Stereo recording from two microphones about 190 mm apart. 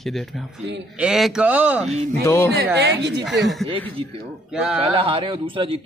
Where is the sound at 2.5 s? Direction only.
65° right (ahead or behind).